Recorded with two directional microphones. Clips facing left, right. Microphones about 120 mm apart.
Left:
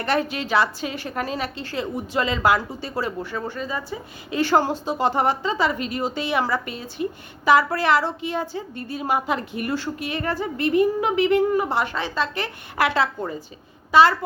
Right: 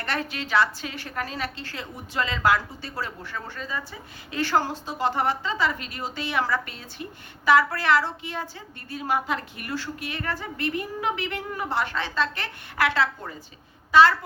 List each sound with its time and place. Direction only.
0.0 s a woman's voice: 15° left (ahead or behind)